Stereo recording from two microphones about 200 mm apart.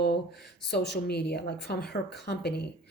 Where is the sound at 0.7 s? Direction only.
55° left (ahead or behind).